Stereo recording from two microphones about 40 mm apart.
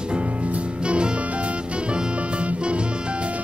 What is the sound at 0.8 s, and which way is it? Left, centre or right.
Music, right.